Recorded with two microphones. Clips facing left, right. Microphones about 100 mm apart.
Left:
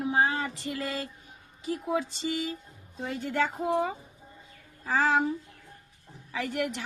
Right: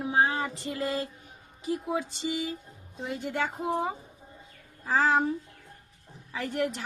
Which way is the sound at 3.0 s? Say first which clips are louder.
Left 2 dB; 20° right (ahead or behind).